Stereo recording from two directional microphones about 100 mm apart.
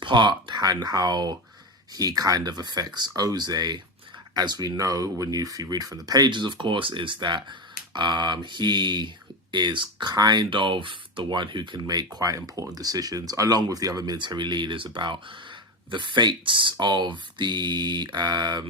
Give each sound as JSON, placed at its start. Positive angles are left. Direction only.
{"t": 0.0, "sound": "speech", "side_deg": -50}